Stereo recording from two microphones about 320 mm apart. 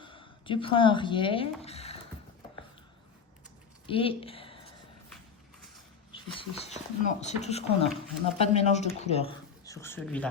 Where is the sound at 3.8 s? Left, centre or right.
Centre.